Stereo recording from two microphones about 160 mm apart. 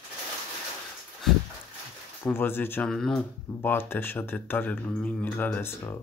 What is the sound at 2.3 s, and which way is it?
Speech, 15° left (ahead or behind).